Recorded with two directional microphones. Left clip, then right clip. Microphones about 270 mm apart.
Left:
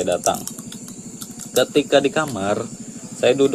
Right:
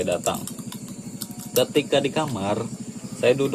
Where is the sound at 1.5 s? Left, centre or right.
Centre.